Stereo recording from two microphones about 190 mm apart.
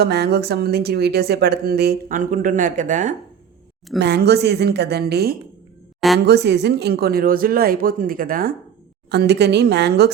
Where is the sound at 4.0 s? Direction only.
60° right (ahead or behind).